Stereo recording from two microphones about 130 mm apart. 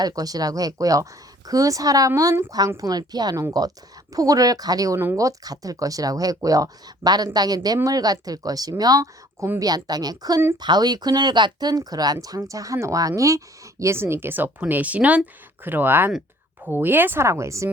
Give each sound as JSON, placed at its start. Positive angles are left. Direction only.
{"t": 0.0, "sound": "speech", "side_deg": -30}